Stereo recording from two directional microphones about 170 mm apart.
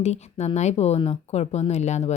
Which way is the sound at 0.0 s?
40° left (ahead or behind).